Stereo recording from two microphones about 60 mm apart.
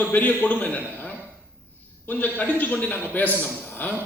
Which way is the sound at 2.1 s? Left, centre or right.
Left.